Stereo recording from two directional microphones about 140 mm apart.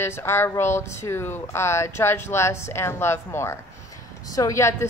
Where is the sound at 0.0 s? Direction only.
15° left (ahead or behind).